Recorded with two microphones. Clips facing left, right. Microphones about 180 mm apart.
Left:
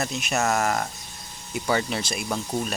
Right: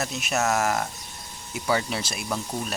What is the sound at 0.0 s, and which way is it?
Speech, 5° right (ahead or behind).